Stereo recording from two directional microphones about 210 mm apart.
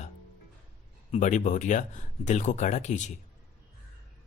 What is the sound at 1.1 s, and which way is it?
Speech, 35° left (ahead or behind).